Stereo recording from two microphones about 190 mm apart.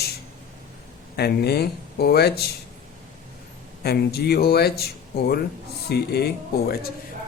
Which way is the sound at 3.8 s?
55° left (ahead or behind).